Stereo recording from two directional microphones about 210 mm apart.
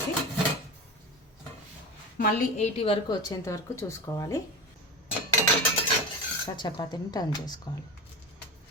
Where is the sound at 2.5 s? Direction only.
30° left (ahead or behind).